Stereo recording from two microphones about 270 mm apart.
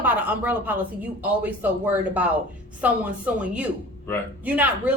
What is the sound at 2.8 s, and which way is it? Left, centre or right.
Speech, centre.